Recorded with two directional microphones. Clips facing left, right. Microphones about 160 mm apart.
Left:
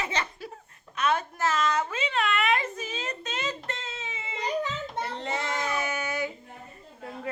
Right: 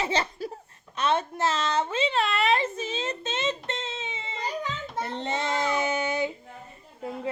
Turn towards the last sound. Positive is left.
turn(degrees=-20)  # may be behind; listen again after turning